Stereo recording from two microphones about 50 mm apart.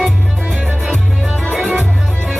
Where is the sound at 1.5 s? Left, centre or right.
Right.